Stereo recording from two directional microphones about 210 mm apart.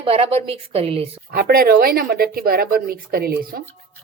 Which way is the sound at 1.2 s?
45° right (ahead or behind).